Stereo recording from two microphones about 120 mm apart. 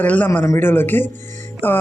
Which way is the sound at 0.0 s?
15° left (ahead or behind).